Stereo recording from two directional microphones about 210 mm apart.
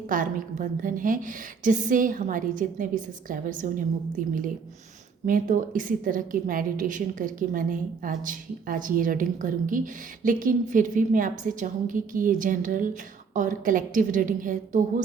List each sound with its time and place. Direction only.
0.1 s a woman's voice: 40° right (ahead or behind)